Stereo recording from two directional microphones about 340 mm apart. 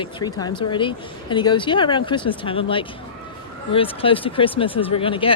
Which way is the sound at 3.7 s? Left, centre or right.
Centre.